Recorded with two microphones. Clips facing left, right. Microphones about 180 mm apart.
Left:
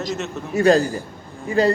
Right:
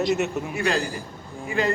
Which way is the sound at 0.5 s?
40° left (ahead or behind).